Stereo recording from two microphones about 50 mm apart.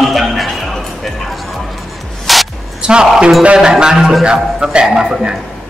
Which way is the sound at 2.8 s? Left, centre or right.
Centre.